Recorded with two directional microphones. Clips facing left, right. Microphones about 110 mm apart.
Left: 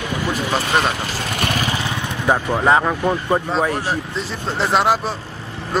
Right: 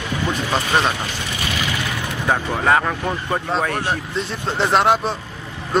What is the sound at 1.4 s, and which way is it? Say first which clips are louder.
Vehicle: left 4 dB; 50° left (ahead or behind).